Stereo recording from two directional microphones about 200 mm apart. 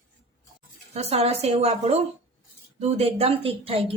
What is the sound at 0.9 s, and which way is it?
A woman's voice, 30° right (ahead or behind).